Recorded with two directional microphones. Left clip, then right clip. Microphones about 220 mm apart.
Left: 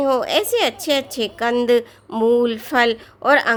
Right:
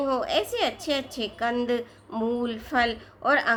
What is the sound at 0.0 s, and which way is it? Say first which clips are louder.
A woman's voice: left 7 dB; 40° left (ahead or behind).